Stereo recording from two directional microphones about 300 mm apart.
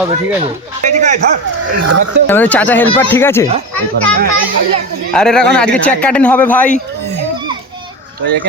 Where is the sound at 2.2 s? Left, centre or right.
Centre.